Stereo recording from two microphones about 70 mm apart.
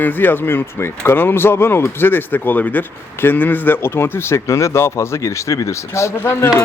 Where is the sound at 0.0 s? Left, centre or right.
Left.